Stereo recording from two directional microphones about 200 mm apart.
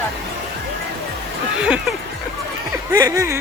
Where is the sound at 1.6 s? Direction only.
5° right (ahead or behind).